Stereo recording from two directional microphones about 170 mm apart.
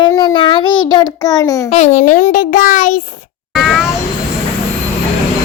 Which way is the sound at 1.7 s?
45° left (ahead or behind).